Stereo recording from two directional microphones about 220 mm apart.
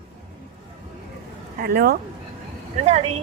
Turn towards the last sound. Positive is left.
turn(degrees=-30)  # may be behind; listen again after turning